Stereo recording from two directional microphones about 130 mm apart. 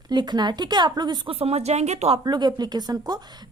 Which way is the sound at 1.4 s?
50° right (ahead or behind).